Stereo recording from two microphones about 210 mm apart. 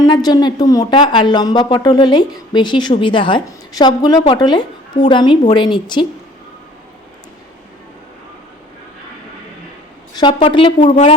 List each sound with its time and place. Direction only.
0.0 s speech: 20° left (ahead or behind)
10.2 s speech: 20° left (ahead or behind)